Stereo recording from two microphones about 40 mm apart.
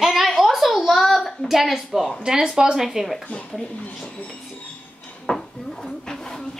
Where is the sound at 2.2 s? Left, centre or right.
Centre.